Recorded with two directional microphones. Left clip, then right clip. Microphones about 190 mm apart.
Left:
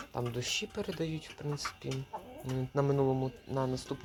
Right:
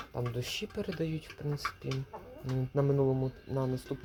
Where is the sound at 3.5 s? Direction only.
5° right (ahead or behind).